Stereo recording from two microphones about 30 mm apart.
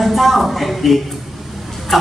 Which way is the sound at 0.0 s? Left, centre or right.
Centre.